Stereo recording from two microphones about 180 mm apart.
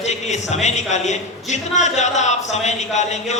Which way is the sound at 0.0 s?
40° left (ahead or behind).